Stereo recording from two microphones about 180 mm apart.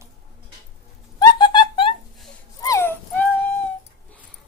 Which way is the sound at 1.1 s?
25° left (ahead or behind).